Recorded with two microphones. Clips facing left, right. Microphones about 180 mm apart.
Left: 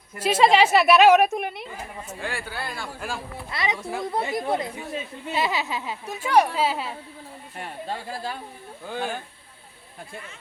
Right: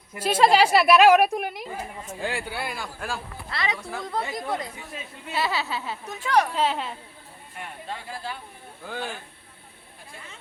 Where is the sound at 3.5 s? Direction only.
20° left (ahead or behind).